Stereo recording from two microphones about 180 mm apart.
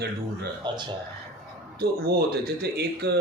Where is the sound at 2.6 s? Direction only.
65° right (ahead or behind).